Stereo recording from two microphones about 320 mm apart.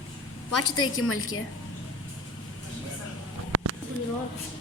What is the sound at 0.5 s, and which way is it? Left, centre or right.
Speech, left.